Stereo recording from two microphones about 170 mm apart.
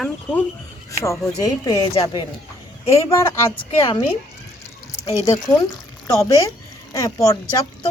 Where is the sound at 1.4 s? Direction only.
20° left (ahead or behind).